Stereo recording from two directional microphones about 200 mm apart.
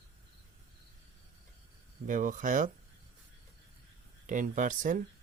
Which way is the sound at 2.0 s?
40° right (ahead or behind).